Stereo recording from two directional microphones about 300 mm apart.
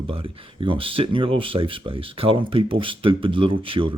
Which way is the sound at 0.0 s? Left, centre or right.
Centre.